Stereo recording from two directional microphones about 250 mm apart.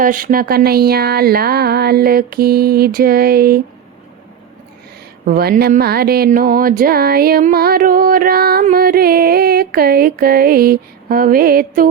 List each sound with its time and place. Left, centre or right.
0.0 s music: right
5.2 s music: right